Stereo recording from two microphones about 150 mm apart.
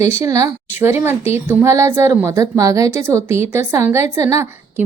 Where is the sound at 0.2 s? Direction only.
20° right (ahead or behind).